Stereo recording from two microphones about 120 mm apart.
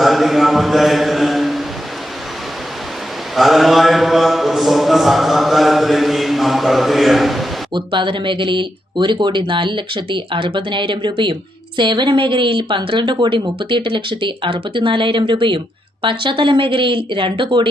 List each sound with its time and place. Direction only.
0.0 s a sound: centre (ahead or behind)
3.3 s speech: centre (ahead or behind)
7.7 s a woman's voice: 45° right (ahead or behind)